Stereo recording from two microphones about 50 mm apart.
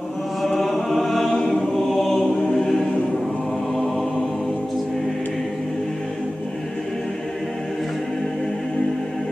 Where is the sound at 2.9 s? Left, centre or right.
Centre.